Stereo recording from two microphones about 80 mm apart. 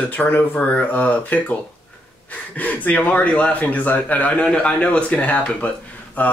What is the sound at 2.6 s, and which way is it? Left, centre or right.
Speech, centre.